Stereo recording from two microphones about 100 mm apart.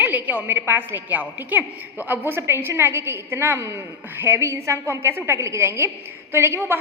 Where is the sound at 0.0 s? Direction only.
20° right (ahead or behind).